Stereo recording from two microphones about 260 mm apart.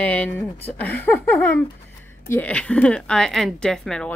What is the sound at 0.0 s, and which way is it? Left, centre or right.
Speech, centre.